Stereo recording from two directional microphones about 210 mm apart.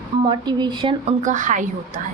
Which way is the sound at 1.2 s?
35° right (ahead or behind).